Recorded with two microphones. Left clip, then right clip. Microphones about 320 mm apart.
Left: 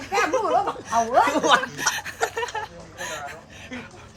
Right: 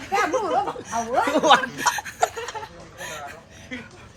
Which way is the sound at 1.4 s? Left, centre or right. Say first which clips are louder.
Right 2 dB; right.